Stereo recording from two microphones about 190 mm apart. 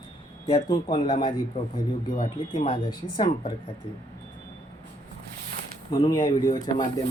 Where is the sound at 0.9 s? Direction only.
30° left (ahead or behind).